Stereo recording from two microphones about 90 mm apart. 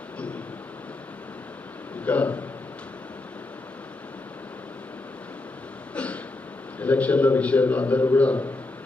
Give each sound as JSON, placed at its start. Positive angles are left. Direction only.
{"t": 2.0, "sound": "a man's voice", "side_deg": 15}
{"t": 5.9, "sound": "a sound", "side_deg": 15}
{"t": 6.7, "sound": "a man's voice", "side_deg": 15}